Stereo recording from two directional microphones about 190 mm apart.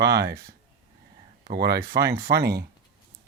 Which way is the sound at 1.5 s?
55° right (ahead or behind).